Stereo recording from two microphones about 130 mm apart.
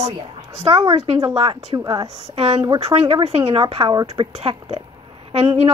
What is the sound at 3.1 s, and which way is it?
Speech, 50° right (ahead or behind).